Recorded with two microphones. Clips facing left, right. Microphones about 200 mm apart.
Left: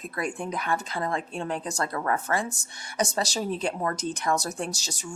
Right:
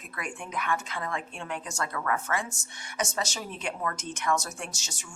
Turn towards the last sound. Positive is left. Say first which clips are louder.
# left 8 dB
turn(degrees=35)  # may be behind; listen again after turning